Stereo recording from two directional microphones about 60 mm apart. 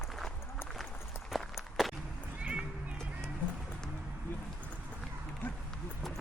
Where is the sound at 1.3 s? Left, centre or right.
Centre.